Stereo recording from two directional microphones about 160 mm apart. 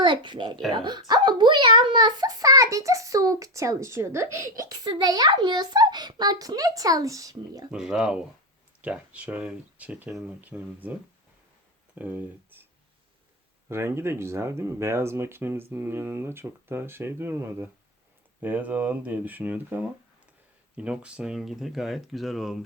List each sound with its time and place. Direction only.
0.0 s a child's voice: 30° right (ahead or behind)
7.7 s speech: 5° right (ahead or behind)
11.9 s speech: 10° right (ahead or behind)
13.7 s speech: 15° right (ahead or behind)